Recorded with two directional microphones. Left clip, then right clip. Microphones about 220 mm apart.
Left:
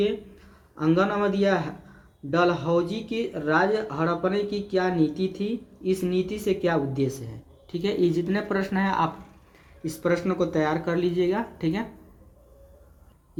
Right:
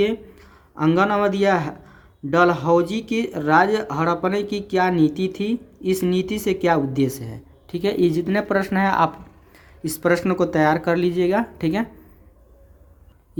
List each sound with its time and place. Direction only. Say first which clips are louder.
0.8 s speech: right 5 dB; 45° right (ahead or behind)